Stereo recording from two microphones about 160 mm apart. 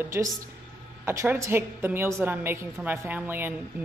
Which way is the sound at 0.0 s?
15° right (ahead or behind).